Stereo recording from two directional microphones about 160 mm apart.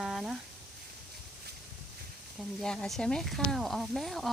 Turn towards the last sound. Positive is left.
turn(degrees=0)  # may be behind; listen again after turning